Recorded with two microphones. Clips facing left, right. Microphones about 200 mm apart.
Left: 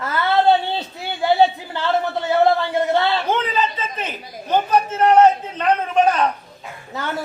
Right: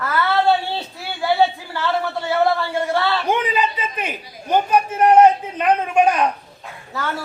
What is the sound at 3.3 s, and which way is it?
A man's voice, 15° right (ahead or behind).